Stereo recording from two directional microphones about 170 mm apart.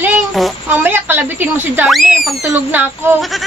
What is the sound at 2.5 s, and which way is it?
Speech, 10° right (ahead or behind).